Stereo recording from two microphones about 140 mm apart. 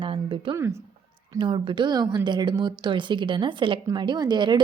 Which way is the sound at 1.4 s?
35° right (ahead or behind).